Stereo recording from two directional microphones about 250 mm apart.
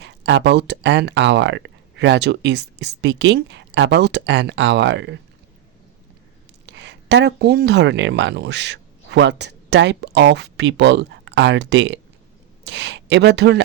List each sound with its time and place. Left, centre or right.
0.0 s speech: right
6.7 s speech: right